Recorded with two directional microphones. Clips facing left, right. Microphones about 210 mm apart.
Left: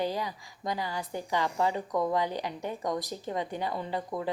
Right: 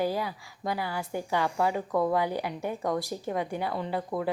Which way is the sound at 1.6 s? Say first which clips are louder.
Right 2 dB; 10° right (ahead or behind).